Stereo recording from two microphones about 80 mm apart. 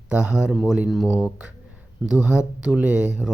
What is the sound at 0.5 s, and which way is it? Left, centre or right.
Speech, centre.